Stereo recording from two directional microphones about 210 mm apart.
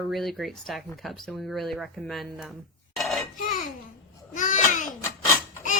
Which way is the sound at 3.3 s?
40° left (ahead or behind).